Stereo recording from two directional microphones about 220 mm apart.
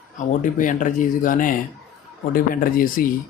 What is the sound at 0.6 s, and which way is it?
Speech, 35° left (ahead or behind).